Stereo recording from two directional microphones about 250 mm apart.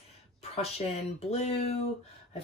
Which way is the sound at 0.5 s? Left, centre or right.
Left.